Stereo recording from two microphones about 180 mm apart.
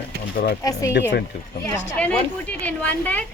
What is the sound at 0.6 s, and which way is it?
Speech, 20° left (ahead or behind).